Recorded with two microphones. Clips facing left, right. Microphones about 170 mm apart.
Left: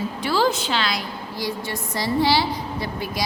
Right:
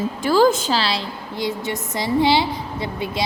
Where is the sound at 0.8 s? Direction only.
30° right (ahead or behind).